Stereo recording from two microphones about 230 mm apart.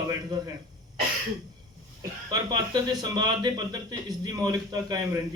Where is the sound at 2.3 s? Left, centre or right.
Centre.